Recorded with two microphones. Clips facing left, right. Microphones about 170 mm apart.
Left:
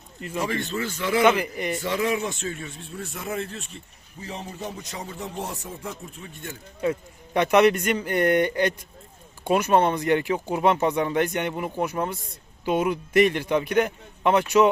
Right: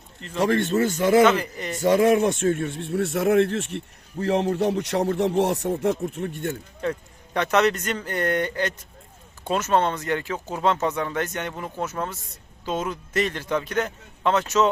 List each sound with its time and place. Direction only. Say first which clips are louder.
0.4 s a man's voice: right 9 dB; 50° right (ahead or behind)
1.2 s speech: right 1 dB; 15° left (ahead or behind)
1.8 s speech: right 10 dB; 45° right (ahead or behind)
6.8 s speech: left 2 dB; 5° left (ahead or behind)